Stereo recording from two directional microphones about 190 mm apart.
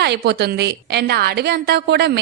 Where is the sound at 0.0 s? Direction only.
60° right (ahead or behind).